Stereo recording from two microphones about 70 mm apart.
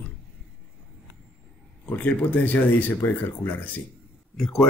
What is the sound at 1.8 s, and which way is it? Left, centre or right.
A man's voice, left.